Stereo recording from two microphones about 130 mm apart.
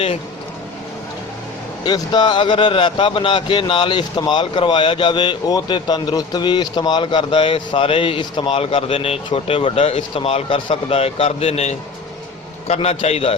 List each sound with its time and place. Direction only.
1.8 s a man's voice: 35° left (ahead or behind); by 13.3 s 50° left (ahead or behind)